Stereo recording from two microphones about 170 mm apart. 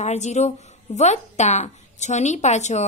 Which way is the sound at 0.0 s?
40° left (ahead or behind).